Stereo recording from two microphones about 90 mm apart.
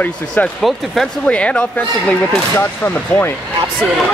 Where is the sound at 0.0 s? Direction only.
15° left (ahead or behind).